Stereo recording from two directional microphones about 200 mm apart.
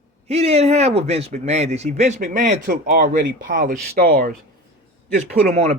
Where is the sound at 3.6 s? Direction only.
45° right (ahead or behind).